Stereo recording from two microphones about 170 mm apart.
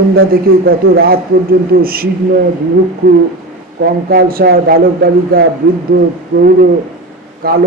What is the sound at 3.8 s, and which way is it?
A man's voice, 65° right (ahead or behind).